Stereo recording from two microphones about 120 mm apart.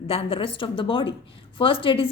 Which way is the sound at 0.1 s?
55° left (ahead or behind).